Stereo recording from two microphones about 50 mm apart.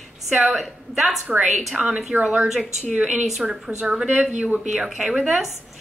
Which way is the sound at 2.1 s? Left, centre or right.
Right.